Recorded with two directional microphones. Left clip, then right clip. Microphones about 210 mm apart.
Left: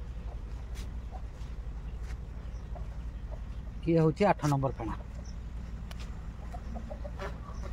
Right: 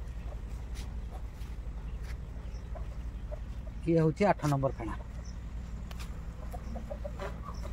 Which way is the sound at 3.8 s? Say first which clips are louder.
Left 1 dB; 20° left (ahead or behind).